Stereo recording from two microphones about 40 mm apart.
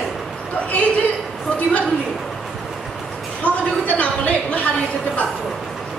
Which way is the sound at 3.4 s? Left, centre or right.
Left.